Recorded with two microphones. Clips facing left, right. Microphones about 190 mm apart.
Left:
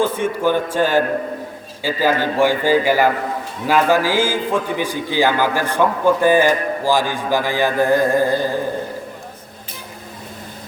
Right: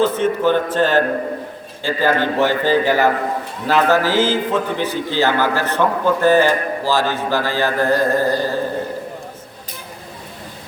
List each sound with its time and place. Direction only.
0.0 s a man's voice: 10° left (ahead or behind)